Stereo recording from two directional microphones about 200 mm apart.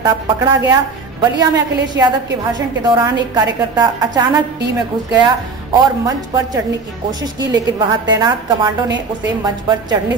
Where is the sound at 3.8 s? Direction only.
20° right (ahead or behind).